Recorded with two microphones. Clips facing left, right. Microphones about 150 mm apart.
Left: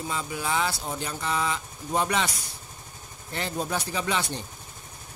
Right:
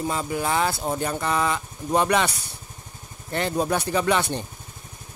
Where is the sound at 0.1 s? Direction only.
50° right (ahead or behind).